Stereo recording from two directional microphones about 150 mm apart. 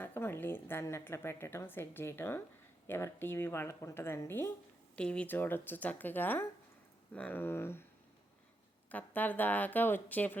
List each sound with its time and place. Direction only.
0.0 s a woman's voice: 15° left (ahead or behind)
8.9 s a woman's voice: 10° left (ahead or behind)